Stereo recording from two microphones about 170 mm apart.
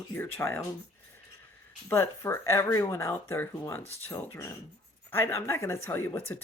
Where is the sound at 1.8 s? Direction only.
15° left (ahead or behind).